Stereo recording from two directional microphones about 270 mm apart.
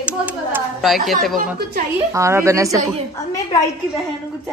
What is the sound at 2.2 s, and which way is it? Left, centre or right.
Speech, centre.